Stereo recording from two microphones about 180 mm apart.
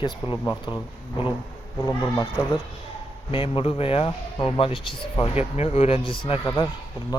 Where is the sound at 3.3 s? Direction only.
30° left (ahead or behind).